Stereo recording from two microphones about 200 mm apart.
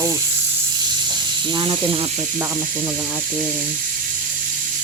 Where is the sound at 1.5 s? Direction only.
25° right (ahead or behind).